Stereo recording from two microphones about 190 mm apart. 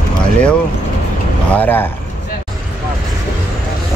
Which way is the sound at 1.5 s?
10° left (ahead or behind).